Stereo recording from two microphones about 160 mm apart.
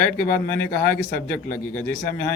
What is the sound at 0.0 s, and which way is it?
A man's voice, 15° left (ahead or behind).